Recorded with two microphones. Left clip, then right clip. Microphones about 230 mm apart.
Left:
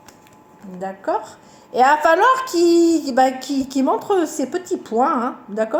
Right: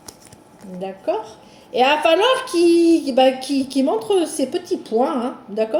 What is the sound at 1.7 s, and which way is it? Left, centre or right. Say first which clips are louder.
Speech: left 1 dB; left.